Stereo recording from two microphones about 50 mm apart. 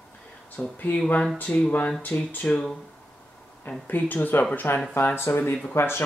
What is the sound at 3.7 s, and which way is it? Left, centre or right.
Speech, left.